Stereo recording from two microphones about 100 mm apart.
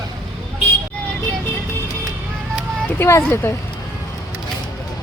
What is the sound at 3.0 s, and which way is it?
Speech, 25° left (ahead or behind).